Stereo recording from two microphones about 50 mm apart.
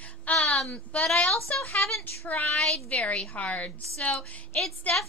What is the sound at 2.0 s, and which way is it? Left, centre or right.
Speech, left.